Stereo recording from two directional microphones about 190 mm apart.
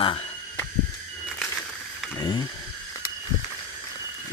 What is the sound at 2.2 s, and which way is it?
Speech, 25° left (ahead or behind).